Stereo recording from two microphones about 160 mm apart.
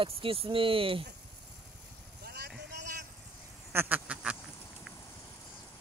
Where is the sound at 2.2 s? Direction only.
85° right.